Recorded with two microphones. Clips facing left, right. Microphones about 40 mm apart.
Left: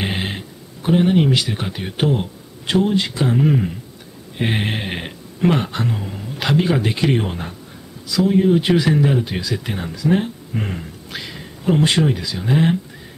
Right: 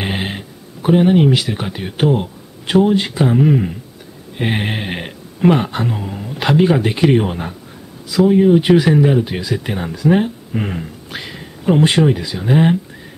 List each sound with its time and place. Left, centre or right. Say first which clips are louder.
0.0 s a sound: right 2 dB; centre
0.8 s speech: right 4 dB; centre
2.6 s speech: right 4 dB; centre
3.3 s speech: right 2 dB; centre